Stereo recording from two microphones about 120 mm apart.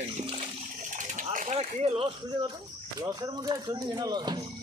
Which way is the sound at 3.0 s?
35° right (ahead or behind).